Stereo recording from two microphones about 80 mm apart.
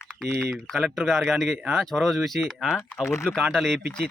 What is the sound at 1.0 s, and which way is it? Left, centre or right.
Speech, centre.